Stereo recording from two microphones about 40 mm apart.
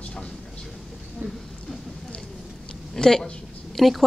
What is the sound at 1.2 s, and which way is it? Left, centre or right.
Speech, right.